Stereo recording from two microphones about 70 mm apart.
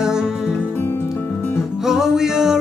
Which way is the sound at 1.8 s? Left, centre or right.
Centre.